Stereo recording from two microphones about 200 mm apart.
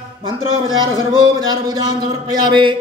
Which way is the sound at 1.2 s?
20° right (ahead or behind).